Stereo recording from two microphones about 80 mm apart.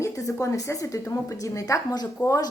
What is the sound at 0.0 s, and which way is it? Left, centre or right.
A woman's voice, left.